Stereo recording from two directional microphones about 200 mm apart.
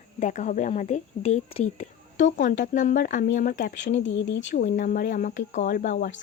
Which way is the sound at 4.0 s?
70° left (ahead or behind).